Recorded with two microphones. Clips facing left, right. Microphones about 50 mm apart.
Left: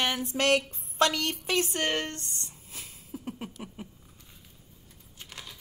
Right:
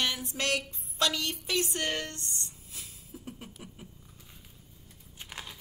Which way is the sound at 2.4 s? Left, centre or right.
Left.